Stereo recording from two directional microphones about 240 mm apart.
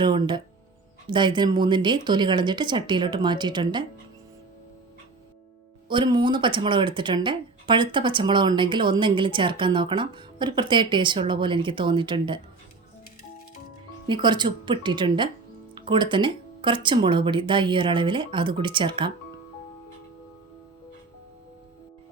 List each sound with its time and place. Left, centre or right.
0.0 s speech: centre
5.9 s speech: centre
14.1 s speech: centre